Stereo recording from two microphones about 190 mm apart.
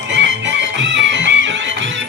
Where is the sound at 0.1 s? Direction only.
70° right (ahead or behind).